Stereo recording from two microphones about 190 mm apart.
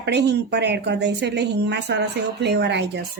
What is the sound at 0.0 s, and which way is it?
A woman's voice, 60° right (ahead or behind).